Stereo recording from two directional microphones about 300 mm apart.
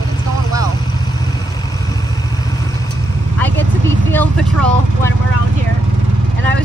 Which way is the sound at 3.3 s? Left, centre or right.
Centre.